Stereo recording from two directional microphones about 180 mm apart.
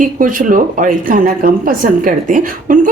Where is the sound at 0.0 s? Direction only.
50° right (ahead or behind).